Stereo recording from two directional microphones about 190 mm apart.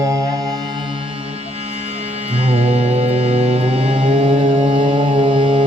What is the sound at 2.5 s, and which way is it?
Music, 35° right (ahead or behind).